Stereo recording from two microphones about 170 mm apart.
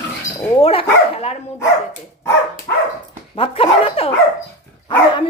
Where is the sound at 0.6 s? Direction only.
35° left (ahead or behind).